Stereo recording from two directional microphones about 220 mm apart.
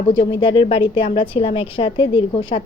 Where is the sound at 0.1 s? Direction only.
20° left (ahead or behind).